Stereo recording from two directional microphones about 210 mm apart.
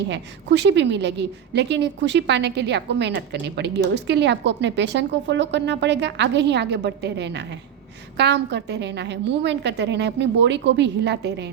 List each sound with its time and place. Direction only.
0.1 s a woman's voice: 55° right (ahead or behind)